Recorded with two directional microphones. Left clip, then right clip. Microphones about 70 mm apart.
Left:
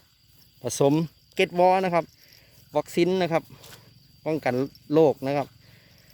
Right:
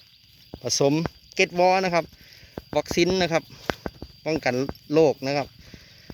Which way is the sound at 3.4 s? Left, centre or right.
Centre.